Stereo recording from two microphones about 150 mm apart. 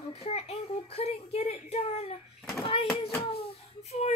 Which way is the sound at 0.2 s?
45° left (ahead or behind).